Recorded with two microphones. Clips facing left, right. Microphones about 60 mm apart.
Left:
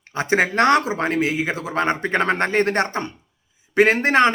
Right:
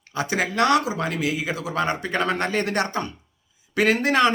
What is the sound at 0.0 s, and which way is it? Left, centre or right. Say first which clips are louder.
Speech: left 5 dB; left.